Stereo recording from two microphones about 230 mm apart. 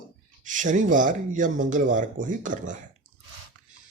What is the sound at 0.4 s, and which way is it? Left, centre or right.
Speech, right.